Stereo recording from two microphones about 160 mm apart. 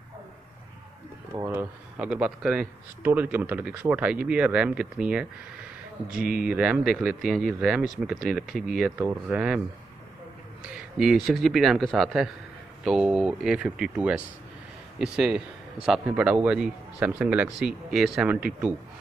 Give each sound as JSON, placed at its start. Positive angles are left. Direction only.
{"t": 1.3, "sound": "speech", "side_deg": -20}
{"t": 2.0, "sound": "speech", "side_deg": -5}
{"t": 6.4, "sound": "speech", "side_deg": -5}
{"t": 10.7, "sound": "speech", "side_deg": 0}